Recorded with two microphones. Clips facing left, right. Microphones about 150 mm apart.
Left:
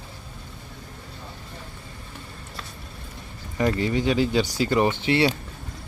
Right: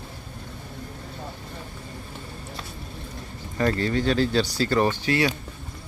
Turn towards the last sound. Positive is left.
turn(degrees=25)  # may be behind; listen again after turning